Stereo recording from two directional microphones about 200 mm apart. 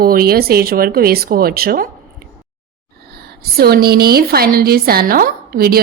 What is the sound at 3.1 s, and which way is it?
A woman's voice, 50° right (ahead or behind).